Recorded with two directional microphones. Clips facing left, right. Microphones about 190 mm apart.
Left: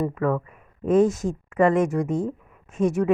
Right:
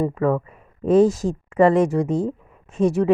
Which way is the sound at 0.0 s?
25° right (ahead or behind).